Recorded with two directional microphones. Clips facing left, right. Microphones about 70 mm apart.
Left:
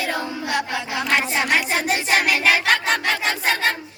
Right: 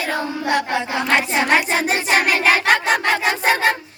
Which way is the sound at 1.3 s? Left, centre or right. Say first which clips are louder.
Right 4 dB; right.